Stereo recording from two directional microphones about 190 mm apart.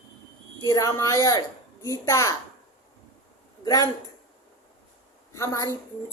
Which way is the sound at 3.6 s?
20° left (ahead or behind).